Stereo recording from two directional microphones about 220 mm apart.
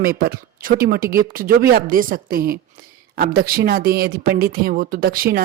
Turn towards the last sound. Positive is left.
turn(degrees=-40)  # may be behind; listen again after turning